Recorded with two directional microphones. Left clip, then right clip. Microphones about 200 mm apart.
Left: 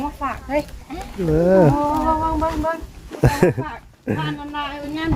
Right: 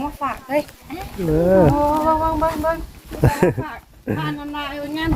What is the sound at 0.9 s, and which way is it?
Speech, 10° left (ahead or behind).